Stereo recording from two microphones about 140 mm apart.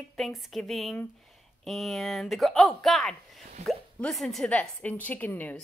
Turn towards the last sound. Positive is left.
turn(degrees=10)  # may be behind; listen again after turning